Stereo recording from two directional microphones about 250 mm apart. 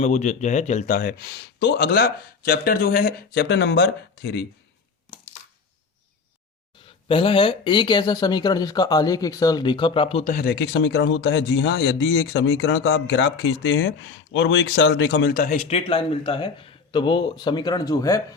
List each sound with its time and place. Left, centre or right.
0.0 s speech: left
6.8 s speech: left
10.3 s speech: left; by 18.2 s centre